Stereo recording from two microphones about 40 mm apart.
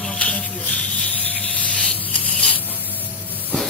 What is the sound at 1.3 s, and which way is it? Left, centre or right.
Spray, left.